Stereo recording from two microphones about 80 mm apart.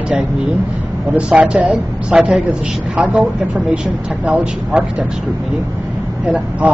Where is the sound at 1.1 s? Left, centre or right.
Centre.